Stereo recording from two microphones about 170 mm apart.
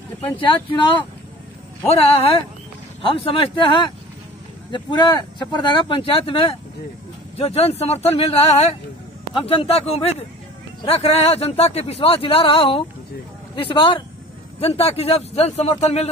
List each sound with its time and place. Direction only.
0.4 s speech: 30° left (ahead or behind)